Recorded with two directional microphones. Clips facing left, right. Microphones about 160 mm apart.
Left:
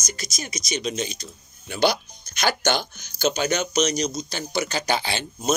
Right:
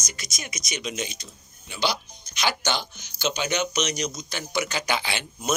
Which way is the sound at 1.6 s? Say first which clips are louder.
Left 6 dB; 50° left (ahead or behind).